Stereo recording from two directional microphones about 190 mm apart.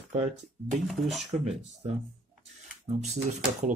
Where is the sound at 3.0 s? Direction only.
40° right (ahead or behind).